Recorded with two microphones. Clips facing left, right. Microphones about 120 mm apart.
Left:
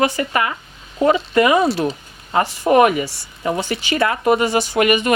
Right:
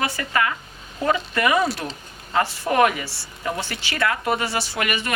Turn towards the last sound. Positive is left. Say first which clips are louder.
# left 10 dB
turn(degrees=20)  # may be behind; listen again after turning